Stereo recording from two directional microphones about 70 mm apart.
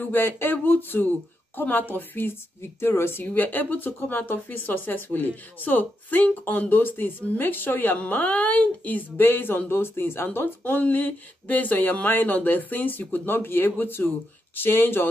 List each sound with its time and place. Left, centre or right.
0.1 s speech: left